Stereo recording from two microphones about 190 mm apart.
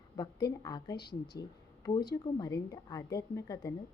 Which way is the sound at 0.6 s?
20° left (ahead or behind).